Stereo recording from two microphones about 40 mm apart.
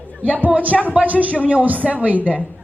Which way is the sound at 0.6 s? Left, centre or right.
Right.